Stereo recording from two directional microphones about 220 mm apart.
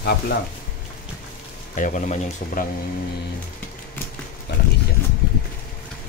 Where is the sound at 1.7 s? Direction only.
35° left (ahead or behind).